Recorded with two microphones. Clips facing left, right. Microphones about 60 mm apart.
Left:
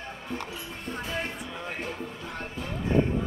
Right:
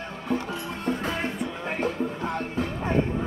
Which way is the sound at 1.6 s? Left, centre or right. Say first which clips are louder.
Right 8 dB; right.